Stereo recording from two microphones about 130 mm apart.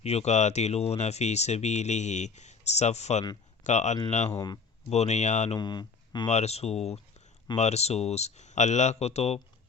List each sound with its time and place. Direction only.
0.0 s speech: 55° left (ahead or behind)
4.4 s speech: 25° left (ahead or behind)
4.9 s speech: 60° left (ahead or behind)
5.5 s speech: 35° left (ahead or behind)
6.2 s speech: 55° left (ahead or behind)